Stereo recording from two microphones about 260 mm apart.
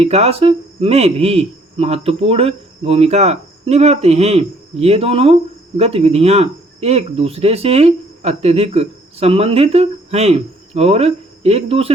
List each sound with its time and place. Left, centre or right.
0.0 s speech: right